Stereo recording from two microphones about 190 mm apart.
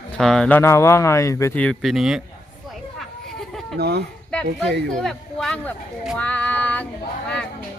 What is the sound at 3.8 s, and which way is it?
Speech, 60° right (ahead or behind).